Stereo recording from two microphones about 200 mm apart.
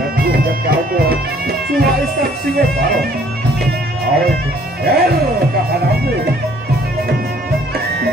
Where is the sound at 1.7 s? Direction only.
50° right (ahead or behind).